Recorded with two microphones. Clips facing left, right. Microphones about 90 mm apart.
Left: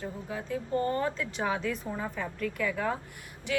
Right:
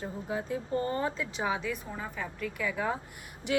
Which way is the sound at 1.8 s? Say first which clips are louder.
Left 3 dB; centre (ahead or behind).